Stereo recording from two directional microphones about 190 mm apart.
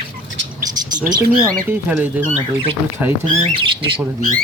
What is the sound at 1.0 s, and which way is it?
Speech, 20° right (ahead or behind).